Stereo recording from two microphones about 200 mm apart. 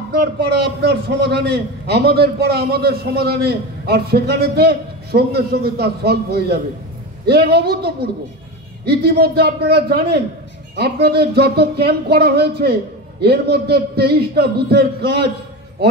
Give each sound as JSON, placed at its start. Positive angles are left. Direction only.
{"t": 0.5, "sound": "a man's voice", "side_deg": -55}